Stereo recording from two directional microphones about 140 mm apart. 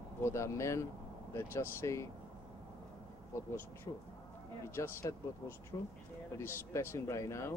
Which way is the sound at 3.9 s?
20° left (ahead or behind).